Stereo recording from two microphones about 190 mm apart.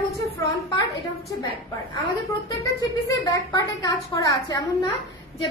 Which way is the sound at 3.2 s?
20° left (ahead or behind).